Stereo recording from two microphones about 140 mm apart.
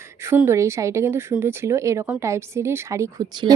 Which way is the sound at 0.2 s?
20° right (ahead or behind).